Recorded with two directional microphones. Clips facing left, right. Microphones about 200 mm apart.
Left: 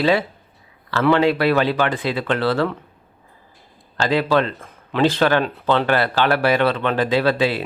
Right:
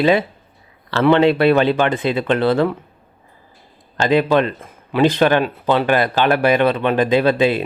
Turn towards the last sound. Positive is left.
turn(degrees=-20)  # may be behind; listen again after turning